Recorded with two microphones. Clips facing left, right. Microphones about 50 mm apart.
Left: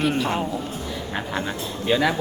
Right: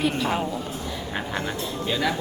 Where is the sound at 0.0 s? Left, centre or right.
Centre.